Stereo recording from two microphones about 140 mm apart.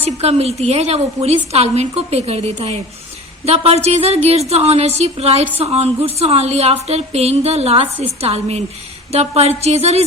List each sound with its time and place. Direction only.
0.0 s a woman's voice: 50° right (ahead or behind)